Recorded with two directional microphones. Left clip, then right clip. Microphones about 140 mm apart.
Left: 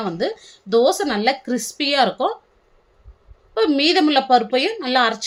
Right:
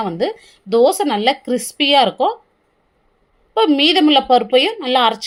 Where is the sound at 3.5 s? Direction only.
20° right (ahead or behind).